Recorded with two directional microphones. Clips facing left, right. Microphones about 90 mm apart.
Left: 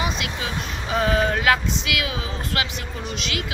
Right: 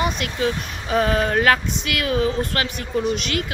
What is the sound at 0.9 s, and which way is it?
Music, 45° right (ahead or behind).